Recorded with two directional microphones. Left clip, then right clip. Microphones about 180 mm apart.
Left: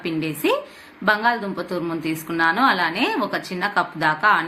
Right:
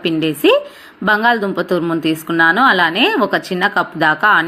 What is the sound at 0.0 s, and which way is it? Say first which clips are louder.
A woman's voice: right 9 dB; 35° right (ahead or behind).